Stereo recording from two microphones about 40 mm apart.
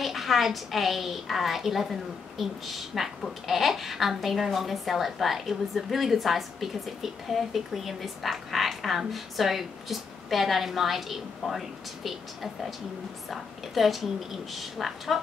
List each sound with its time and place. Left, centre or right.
0.0 s a woman's voice: centre